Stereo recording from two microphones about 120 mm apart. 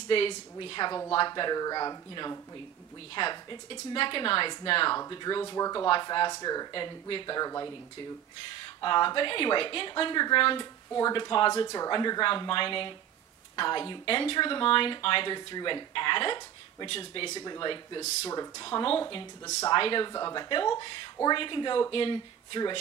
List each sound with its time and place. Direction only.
0.1 s speech: 45° left (ahead or behind); by 2.4 s 30° left (ahead or behind)
3.2 s speech: 40° left (ahead or behind)
4.9 s speech: 35° left (ahead or behind)
5.9 s speech: 40° left (ahead or behind)
8.5 s speech: 40° left (ahead or behind)
17.3 s speech: 35° left (ahead or behind)
20.1 s speech: 30° left (ahead or behind)
20.4 s speech: 40° left (ahead or behind)